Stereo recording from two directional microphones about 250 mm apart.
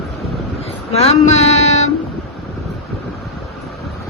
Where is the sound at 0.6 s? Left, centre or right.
Left.